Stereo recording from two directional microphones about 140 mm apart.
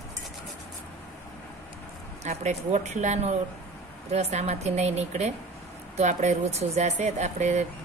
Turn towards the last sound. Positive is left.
turn(degrees=-55)  # may be behind; listen again after turning